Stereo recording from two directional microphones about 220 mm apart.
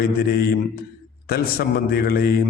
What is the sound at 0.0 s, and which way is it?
A man's voice, 45° left (ahead or behind).